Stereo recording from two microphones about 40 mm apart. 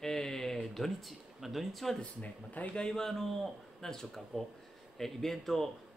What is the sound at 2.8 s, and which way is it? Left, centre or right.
A man's voice, centre.